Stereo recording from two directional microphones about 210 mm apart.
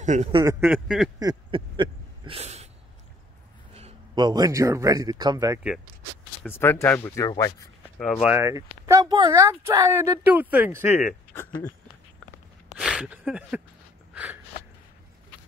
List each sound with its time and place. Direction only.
0.0 s speech: 35° right (ahead or behind)
0.5 s a sound: 10° right (ahead or behind)
1.2 s a sound: 25° right (ahead or behind)
3.7 s a man's voice: 25° right (ahead or behind)
6.4 s speech: 10° left (ahead or behind)
8.0 s speech: centre (ahead or behind)
12.7 s speech: centre (ahead or behind)
14.1 s gasp: 10° right (ahead or behind)